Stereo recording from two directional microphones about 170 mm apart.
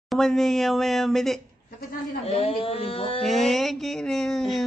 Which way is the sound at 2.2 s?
35° left (ahead or behind).